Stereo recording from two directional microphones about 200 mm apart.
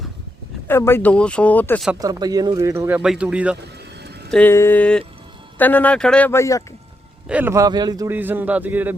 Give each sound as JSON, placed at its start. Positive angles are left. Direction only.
{"t": 0.7, "sound": "speech", "side_deg": 10}
{"t": 2.0, "sound": "a man's voice", "side_deg": -20}
{"t": 4.3, "sound": "speech", "side_deg": 10}
{"t": 7.3, "sound": "a man's voice", "side_deg": -10}